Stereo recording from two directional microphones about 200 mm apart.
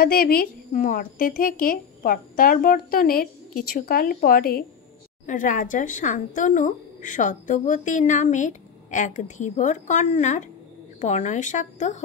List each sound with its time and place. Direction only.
0.0 s a woman's voice: 50° left (ahead or behind)